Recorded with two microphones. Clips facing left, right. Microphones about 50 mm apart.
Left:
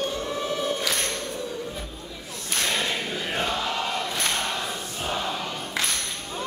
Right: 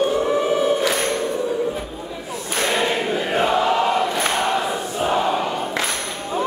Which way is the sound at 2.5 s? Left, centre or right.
Centre.